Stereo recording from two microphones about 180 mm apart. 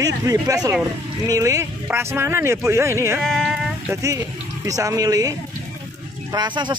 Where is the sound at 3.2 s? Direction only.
Centre (ahead or behind).